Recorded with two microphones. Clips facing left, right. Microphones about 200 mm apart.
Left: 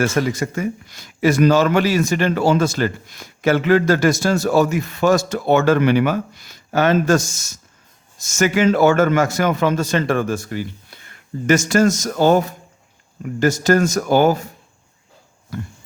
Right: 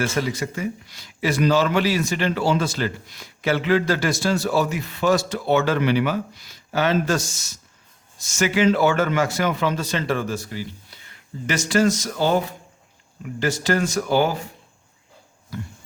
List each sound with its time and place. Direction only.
0.0 s speech: 45° left (ahead or behind)
15.5 s speech: 50° left (ahead or behind)